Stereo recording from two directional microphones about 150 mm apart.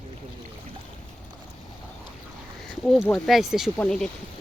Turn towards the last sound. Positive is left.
turn(degrees=10)  # may be behind; listen again after turning